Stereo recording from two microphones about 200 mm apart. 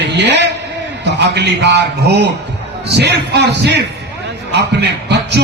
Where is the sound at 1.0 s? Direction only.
60° right (ahead or behind).